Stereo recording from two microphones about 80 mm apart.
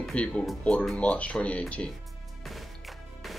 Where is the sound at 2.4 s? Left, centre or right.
Centre.